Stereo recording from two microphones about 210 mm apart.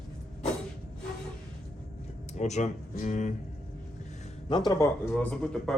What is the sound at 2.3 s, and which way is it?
Speech, 35° left (ahead or behind).